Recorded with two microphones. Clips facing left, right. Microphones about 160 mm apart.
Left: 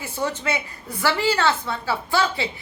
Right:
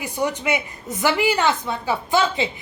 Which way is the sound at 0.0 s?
15° right (ahead or behind).